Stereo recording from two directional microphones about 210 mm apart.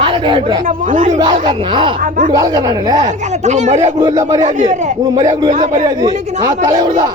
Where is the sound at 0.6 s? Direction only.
40° right (ahead or behind).